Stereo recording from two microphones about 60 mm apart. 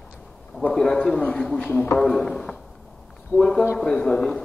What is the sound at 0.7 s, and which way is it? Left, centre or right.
A man's voice, centre.